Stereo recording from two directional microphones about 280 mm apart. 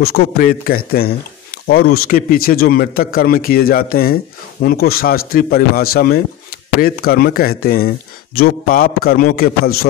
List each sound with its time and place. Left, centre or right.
0.0 s a man's voice: left